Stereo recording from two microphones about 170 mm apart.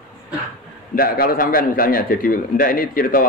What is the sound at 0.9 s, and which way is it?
A man's voice, 60° left (ahead or behind).